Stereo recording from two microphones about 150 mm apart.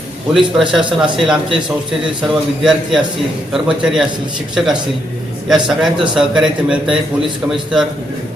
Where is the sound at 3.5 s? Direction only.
Centre (ahead or behind).